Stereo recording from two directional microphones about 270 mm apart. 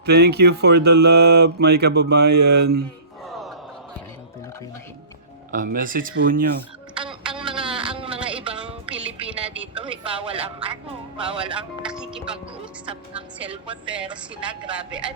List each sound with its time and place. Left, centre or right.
0.0 s speech: right
3.2 s a sound: centre
5.5 s speech: right
7.0 s music: centre
7.6 s a sound: centre
8.3 s music: centre
9.5 s a sound: centre
11.3 s speech: centre
11.8 s music: centre
13.8 s speech: centre
14.1 s speech: centre